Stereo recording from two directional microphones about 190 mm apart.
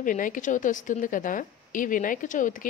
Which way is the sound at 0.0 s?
45° left (ahead or behind).